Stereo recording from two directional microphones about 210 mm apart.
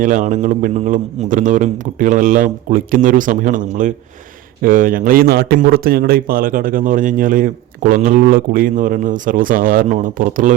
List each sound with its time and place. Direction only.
0.0 s a man's voice: 40° right (ahead or behind)